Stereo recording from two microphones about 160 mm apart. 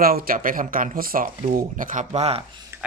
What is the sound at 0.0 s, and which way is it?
Speech, 65° right (ahead or behind).